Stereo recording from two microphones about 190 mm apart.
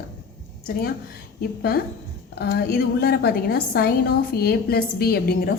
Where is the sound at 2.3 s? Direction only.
55° left (ahead or behind).